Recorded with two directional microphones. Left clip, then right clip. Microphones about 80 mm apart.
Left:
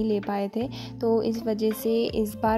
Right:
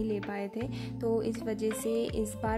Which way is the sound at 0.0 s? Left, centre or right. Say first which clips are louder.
Left 8 dB; left.